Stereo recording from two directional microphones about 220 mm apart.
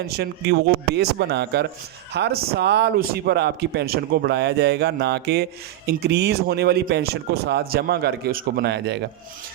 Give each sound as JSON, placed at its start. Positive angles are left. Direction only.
{"t": 0.0, "sound": "speech", "side_deg": -50}